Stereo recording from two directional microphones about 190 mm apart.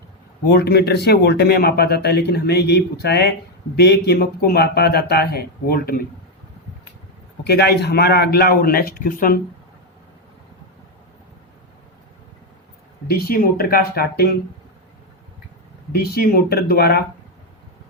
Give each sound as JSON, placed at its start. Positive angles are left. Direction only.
{"t": 0.4, "sound": "speech", "side_deg": 60}
{"t": 7.4, "sound": "speech", "side_deg": 60}
{"t": 13.1, "sound": "speech", "side_deg": 50}
{"t": 15.9, "sound": "speech", "side_deg": 55}